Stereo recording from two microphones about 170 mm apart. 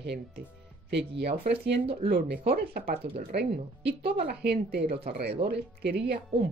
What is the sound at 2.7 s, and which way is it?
Speech, 60° right (ahead or behind).